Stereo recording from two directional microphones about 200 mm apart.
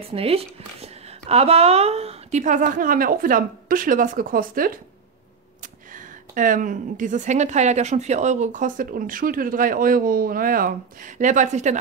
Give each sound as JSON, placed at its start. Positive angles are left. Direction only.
{"t": 0.1, "sound": "speech", "side_deg": -30}